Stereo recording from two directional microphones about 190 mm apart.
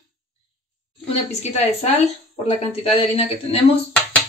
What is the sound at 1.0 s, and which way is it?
Speech, 35° left (ahead or behind).